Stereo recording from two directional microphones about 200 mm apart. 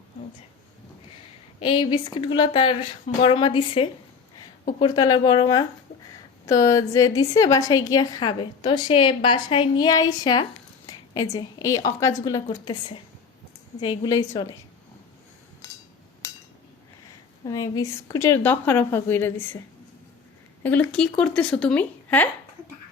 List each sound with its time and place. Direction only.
1.6 s a woman's voice: 25° left (ahead or behind)
12.5 s a woman's voice: 25° left (ahead or behind)
16.2 s a sound: 15° left (ahead or behind)
17.4 s a woman's voice: 15° left (ahead or behind)
20.9 s speech: 5° left (ahead or behind)